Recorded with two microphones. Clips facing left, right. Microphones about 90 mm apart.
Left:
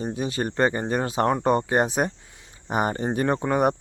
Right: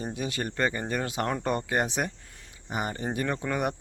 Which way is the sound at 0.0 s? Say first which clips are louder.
Left 5 dB; 30° left (ahead or behind).